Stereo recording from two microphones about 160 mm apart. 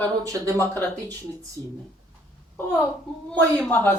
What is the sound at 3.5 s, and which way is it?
Speech, 10° left (ahead or behind).